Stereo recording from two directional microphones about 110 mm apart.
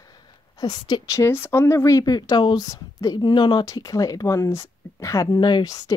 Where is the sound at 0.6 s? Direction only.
40° left (ahead or behind).